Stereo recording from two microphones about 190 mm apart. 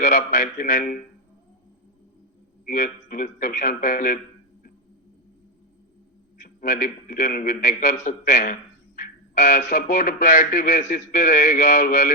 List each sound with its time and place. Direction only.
0.0 s a man's voice: 40° left (ahead or behind)
2.6 s a man's voice: 45° left (ahead or behind)
6.4 s a man's voice: 45° left (ahead or behind)